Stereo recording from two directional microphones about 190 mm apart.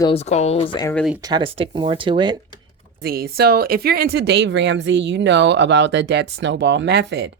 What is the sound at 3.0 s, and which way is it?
Speech, 55° right (ahead or behind).